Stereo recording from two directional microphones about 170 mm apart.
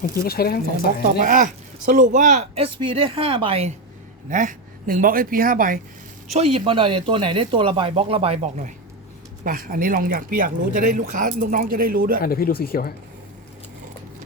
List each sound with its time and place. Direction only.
0.0 s speech: 65° left (ahead or behind)
1.2 s speech: 50° right (ahead or behind)
2.7 s speech: 30° right (ahead or behind)
4.3 s speech: 50° right (ahead or behind)
6.3 s speech: 35° right (ahead or behind)
9.4 s speech: 55° right (ahead or behind)
12.2 s speech: 60° left (ahead or behind)